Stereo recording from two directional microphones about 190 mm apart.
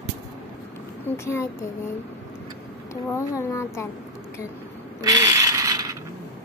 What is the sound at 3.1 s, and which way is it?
Speech, 15° left (ahead or behind).